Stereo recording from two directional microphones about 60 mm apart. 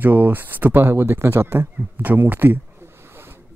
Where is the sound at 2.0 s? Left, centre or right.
Right.